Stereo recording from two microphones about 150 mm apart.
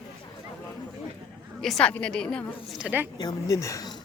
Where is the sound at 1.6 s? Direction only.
5° left (ahead or behind).